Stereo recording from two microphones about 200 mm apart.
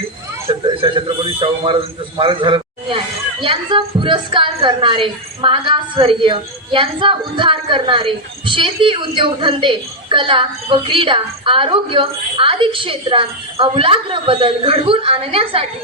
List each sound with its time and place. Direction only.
0.4 s a man's voice: 25° right (ahead or behind)